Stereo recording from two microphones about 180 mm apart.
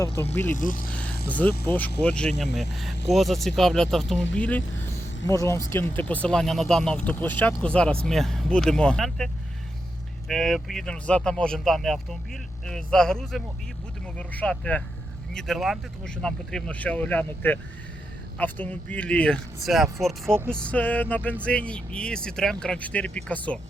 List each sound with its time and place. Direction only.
0.2 s speech: 15° left (ahead or behind)
0.5 s speech: 50° left (ahead or behind)
1.3 s speech: 10° left (ahead or behind)